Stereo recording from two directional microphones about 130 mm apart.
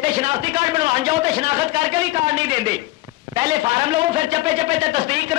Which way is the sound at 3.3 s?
35° right (ahead or behind).